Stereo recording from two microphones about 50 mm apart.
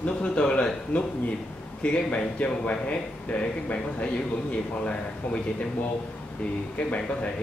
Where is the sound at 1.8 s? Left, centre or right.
Left.